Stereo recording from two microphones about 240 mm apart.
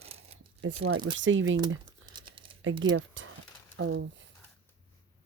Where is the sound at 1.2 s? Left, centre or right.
Right.